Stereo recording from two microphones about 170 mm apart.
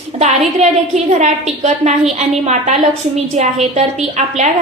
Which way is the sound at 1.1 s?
45° right (ahead or behind).